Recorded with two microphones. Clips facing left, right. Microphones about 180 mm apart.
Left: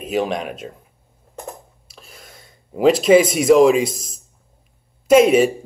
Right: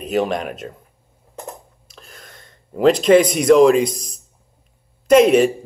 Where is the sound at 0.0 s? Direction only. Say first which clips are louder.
Right 1 dB; centre (ahead or behind).